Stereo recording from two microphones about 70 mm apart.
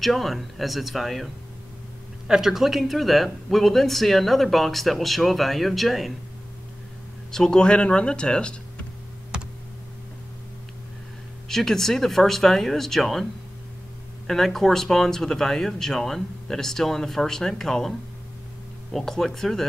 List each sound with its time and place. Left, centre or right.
0.0 s speech: centre
7.2 s speech: centre
9.3 s computer keyboard: centre
11.4 s speech: centre